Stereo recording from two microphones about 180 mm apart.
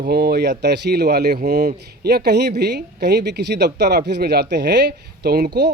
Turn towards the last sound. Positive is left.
turn(degrees=-60)  # may be behind; listen again after turning